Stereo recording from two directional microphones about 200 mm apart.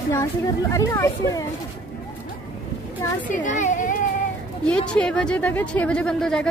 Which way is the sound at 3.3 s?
40° left (ahead or behind).